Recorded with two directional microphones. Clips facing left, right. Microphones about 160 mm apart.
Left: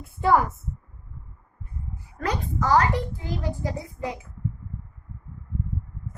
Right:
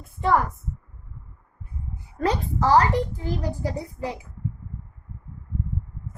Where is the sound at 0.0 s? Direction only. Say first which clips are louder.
Left 1 dB; 5° left (ahead or behind).